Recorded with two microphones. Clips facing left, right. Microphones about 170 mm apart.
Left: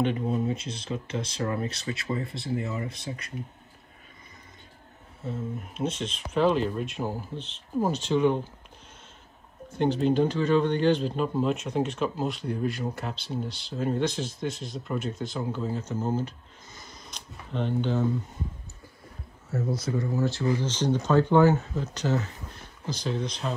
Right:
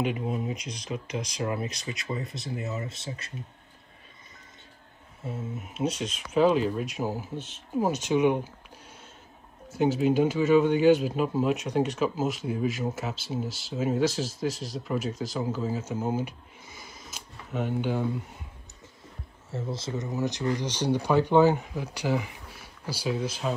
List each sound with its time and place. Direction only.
0.0 s speech: 10° right (ahead or behind)
5.3 s speech: 5° right (ahead or behind)
7.8 s speech: 15° right (ahead or behind)
9.7 s speech: 5° right (ahead or behind)
19.5 s speech: 25° right (ahead or behind); by 23.5 s 5° right (ahead or behind)